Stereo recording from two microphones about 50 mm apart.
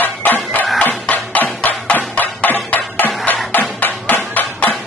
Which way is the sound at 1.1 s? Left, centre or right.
Left.